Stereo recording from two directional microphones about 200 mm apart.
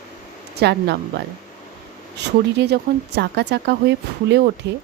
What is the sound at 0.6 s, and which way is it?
Speech, 55° right (ahead or behind).